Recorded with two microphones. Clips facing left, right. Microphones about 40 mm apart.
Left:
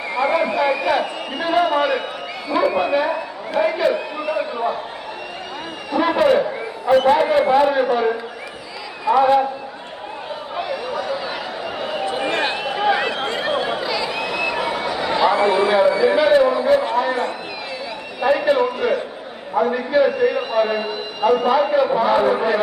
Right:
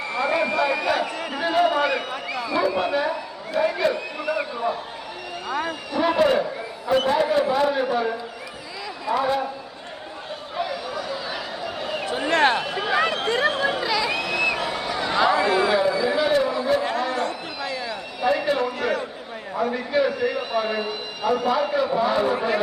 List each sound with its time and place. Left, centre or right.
0.3 s a man's voice: centre
5.9 s a man's voice: centre
10.5 s a sound: centre
15.4 s a man's voice: left